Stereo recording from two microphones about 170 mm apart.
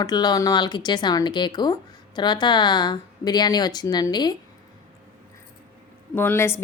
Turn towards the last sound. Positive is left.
turn(degrees=15)  # may be behind; listen again after turning